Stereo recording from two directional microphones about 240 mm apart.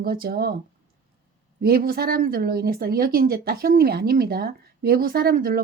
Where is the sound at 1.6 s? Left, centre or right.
Right.